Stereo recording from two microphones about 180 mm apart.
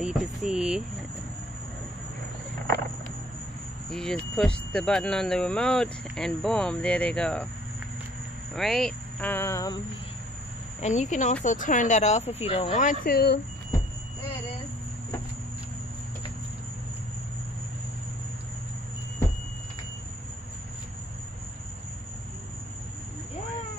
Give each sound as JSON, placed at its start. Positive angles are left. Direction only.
{"t": 0.0, "sound": "speech", "side_deg": 0}
{"t": 3.9, "sound": "speech", "side_deg": 5}
{"t": 8.5, "sound": "speech", "side_deg": 0}
{"t": 10.8, "sound": "speech", "side_deg": 40}